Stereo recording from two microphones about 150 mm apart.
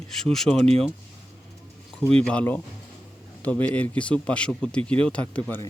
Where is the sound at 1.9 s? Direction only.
5° left (ahead or behind).